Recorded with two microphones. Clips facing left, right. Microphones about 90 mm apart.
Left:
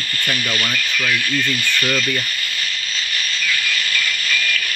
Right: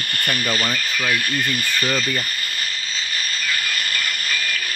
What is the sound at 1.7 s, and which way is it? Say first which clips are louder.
Speech: left 1 dB; 35° right (ahead or behind).